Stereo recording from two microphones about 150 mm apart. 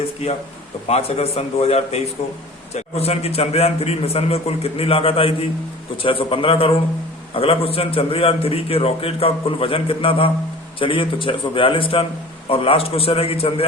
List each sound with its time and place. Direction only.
0.9 s a man's voice: 45° left (ahead or behind)